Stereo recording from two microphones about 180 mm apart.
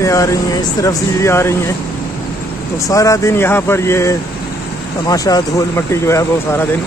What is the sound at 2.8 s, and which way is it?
Speech, 20° left (ahead or behind).